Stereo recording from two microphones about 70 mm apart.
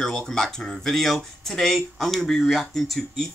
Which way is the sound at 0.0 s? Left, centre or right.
Centre.